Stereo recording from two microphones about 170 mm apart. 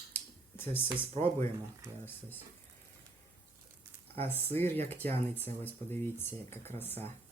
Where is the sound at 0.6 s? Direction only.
15° left (ahead or behind).